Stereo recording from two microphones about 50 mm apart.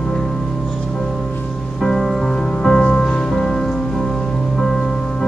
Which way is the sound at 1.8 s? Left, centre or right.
Centre.